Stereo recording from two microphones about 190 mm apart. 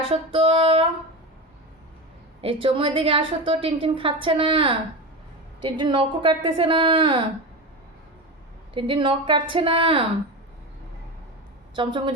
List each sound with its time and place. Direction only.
0.0 s a woman's voice: 30° right (ahead or behind)
2.4 s a woman's voice: 30° right (ahead or behind)
8.7 s a woman's voice: 25° right (ahead or behind)
11.7 s a woman's voice: 25° right (ahead or behind)